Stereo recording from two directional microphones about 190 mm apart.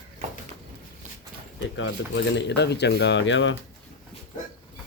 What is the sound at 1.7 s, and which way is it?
Speech, 75° left (ahead or behind).